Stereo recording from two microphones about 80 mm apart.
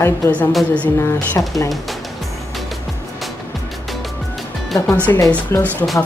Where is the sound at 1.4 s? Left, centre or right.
Left.